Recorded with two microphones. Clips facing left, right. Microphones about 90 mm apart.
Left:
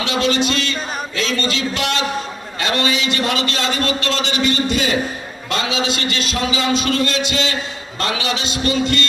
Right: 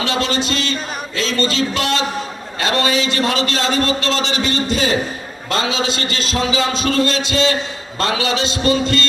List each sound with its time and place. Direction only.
0.0 s a man's voice: 30° right (ahead or behind)